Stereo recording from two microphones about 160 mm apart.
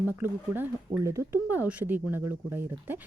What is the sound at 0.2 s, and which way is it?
Speech, 15° right (ahead or behind).